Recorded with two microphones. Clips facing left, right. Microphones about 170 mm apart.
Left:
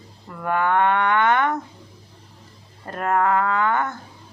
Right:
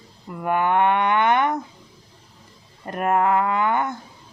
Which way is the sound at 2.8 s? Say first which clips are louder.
Right 1 dB; 15° right (ahead or behind).